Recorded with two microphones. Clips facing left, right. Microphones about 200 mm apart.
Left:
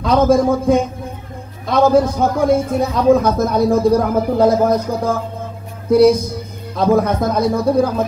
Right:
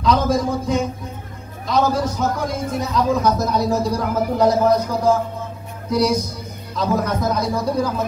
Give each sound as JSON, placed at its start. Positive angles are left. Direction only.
{"t": 0.0, "sound": "speech", "side_deg": 55}